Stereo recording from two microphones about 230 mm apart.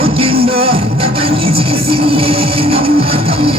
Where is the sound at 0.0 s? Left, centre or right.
Right.